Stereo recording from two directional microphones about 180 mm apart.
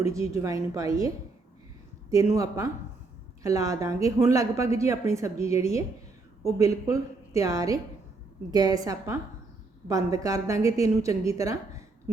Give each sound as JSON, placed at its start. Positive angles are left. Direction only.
{"t": 0.0, "sound": "a woman's voice", "side_deg": -15}